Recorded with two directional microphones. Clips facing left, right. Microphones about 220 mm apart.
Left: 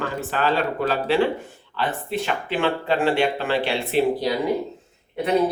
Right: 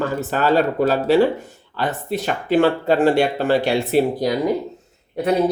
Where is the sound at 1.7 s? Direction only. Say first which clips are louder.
Right 2 dB; 45° right (ahead or behind).